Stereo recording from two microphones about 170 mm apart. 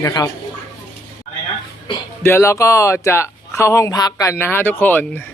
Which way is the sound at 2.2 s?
15° left (ahead or behind).